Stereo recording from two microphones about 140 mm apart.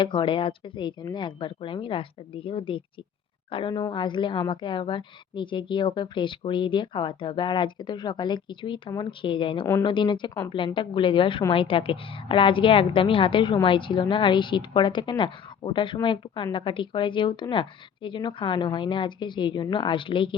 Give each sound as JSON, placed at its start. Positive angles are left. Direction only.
{"t": 0.0, "sound": "a woman's voice", "side_deg": 35}